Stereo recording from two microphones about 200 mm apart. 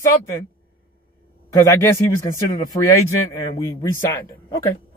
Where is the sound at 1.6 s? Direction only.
15° left (ahead or behind).